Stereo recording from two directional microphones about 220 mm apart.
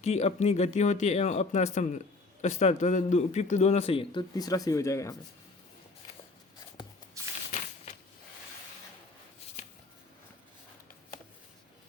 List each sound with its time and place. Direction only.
0.0 s a man's voice: 30° left (ahead or behind); by 5.1 s 15° left (ahead or behind)